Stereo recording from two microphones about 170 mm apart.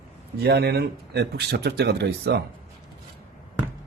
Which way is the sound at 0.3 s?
70° right (ahead or behind).